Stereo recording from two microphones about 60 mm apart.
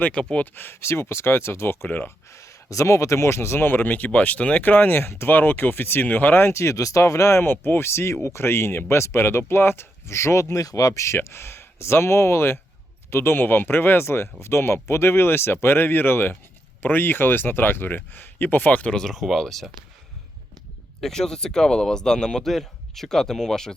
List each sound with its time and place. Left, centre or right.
0.1 s speech: centre
0.5 s speech: left
1.9 s speech: left
2.3 s speech: left
6.6 s speech: left
18.9 s speech: centre
21.0 s speech: centre